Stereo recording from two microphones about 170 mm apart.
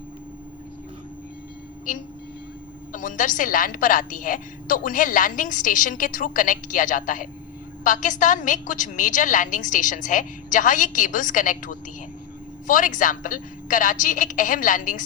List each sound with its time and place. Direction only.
2.9 s a woman's voice: 50° left (ahead or behind)